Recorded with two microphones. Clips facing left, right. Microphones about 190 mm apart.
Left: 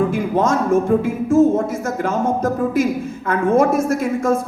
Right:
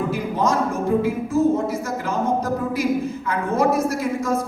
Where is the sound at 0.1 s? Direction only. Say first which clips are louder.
Left 4 dB; 50° left (ahead or behind).